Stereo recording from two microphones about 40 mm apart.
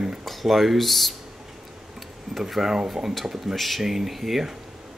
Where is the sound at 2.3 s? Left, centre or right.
Centre.